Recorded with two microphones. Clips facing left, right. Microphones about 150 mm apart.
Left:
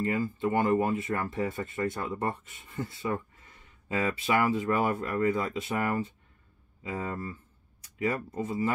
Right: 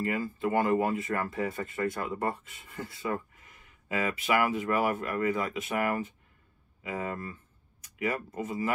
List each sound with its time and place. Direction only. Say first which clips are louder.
0.4 s speech: even; 25° left (ahead or behind)